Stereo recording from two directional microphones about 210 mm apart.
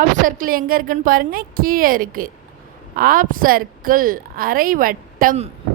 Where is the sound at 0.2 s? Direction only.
40° right (ahead or behind).